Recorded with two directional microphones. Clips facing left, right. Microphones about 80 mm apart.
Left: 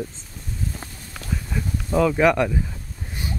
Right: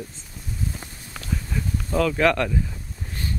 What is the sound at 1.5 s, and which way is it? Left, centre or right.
Speech, centre.